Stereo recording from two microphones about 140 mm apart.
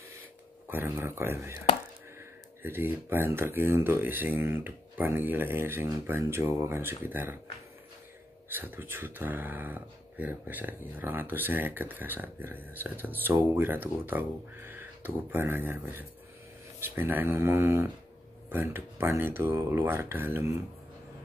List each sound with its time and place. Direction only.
0.7 s speech: 15° right (ahead or behind)
2.6 s speech: 15° right (ahead or behind)
8.5 s speech: 15° right (ahead or behind)